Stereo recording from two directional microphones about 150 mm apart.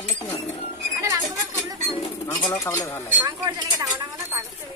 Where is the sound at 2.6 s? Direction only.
20° left (ahead or behind).